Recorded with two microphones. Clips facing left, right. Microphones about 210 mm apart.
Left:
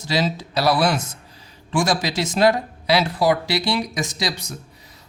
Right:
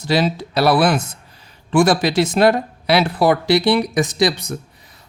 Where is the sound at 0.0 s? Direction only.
60° right (ahead or behind).